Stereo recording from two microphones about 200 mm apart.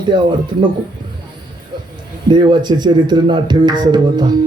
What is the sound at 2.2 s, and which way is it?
A man's voice, 20° right (ahead or behind).